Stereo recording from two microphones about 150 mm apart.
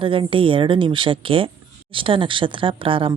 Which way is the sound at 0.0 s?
35° right (ahead or behind).